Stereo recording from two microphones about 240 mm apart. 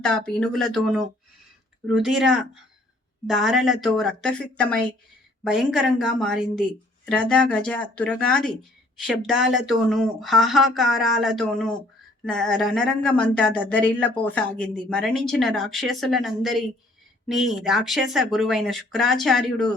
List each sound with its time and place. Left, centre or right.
0.0 s speech: centre